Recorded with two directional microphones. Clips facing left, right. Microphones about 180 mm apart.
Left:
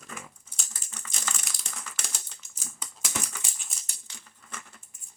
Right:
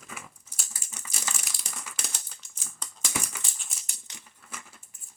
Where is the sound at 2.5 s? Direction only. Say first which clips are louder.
Left 1 dB; 10° left (ahead or behind).